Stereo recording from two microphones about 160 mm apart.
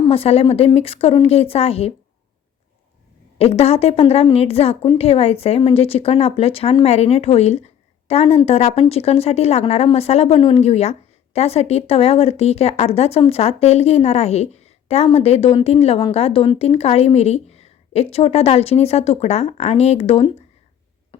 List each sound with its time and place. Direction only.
0.1 s speech: 40° left (ahead or behind)
3.3 s a woman's voice: 40° left (ahead or behind)